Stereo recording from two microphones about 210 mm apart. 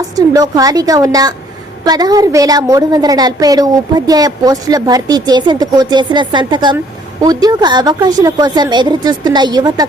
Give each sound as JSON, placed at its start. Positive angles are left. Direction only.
{"t": 0.2, "sound": "a woman's voice", "side_deg": -15}